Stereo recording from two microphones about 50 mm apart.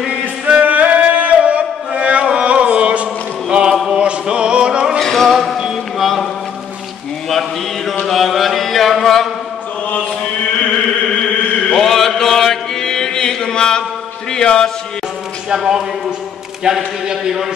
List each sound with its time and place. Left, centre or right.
0.6 s a sound: right; by 4.0 s centre
4.0 s music: right
5.0 s music: centre
5.6 s mantra: centre
7.2 s a sound: centre
8.1 s mantra: centre
9.8 s chant: left
11.7 s mantra: centre
14.3 s chant: centre
15.5 s a sound: centre
16.6 s a man's voice: centre